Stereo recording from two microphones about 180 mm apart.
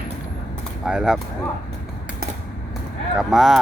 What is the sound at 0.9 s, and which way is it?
Speech, 5° right (ahead or behind).